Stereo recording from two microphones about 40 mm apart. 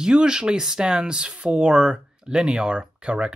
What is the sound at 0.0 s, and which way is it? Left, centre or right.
Speech, right.